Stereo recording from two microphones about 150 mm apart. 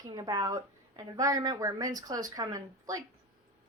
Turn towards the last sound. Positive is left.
turn(degrees=-20)  # may be behind; listen again after turning